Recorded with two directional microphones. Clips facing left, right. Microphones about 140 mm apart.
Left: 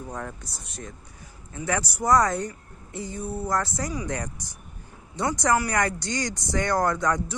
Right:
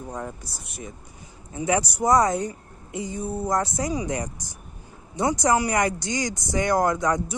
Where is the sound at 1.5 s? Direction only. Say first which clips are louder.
Right 5 dB; 20° right (ahead or behind).